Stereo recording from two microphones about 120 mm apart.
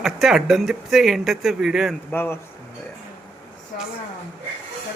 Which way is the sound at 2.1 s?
15° left (ahead or behind).